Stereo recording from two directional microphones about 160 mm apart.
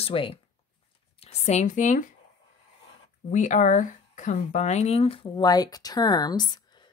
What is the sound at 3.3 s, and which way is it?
Speech, 50° left (ahead or behind).